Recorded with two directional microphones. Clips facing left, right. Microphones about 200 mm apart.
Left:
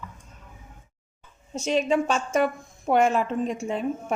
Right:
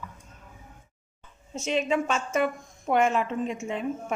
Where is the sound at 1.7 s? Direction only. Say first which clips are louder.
Left 3 dB; 35° left (ahead or behind).